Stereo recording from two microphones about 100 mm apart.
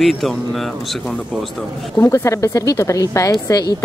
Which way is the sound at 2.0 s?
30° left (ahead or behind).